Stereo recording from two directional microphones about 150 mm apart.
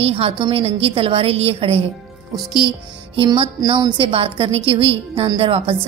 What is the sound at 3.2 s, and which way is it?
A woman's voice, 35° right (ahead or behind).